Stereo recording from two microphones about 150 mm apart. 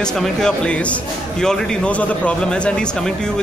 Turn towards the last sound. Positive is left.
turn(degrees=5)  # may be behind; listen again after turning